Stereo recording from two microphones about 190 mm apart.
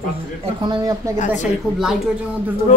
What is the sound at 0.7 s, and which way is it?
Speech, 20° right (ahead or behind).